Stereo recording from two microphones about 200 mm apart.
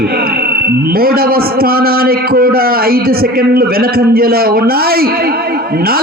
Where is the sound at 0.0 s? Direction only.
50° right (ahead or behind).